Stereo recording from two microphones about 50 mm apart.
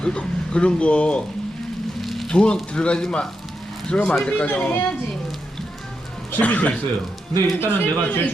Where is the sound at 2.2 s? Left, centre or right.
Centre.